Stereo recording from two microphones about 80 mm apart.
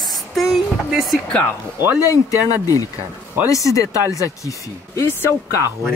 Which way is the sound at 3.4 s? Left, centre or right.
Left.